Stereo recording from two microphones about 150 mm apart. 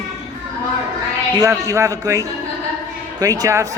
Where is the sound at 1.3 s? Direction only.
20° right (ahead or behind).